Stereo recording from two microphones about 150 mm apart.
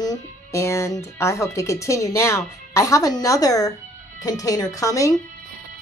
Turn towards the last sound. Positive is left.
turn(degrees=20)  # may be behind; listen again after turning